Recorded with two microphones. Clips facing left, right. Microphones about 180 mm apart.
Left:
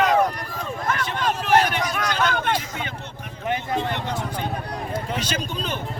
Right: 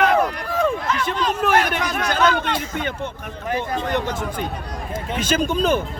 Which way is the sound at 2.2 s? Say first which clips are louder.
Right 4 dB; 50° left (ahead or behind).